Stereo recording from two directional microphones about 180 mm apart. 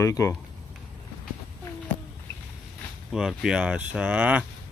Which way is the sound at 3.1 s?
5° right (ahead or behind).